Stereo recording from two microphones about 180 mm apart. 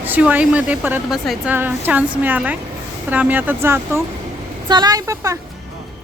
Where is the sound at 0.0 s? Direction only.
10° right (ahead or behind).